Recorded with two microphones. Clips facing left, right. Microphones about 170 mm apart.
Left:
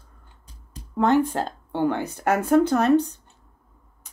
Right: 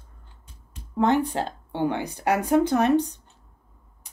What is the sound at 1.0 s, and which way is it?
Speech, 15° right (ahead or behind).